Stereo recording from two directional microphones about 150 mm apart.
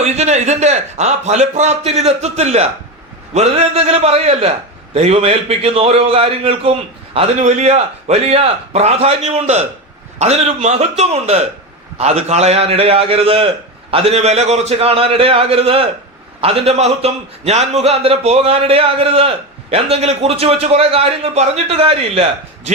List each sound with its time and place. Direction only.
0.0 s a man's voice: 50° right (ahead or behind)